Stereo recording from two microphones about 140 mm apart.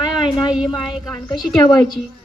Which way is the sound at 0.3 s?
35° left (ahead or behind).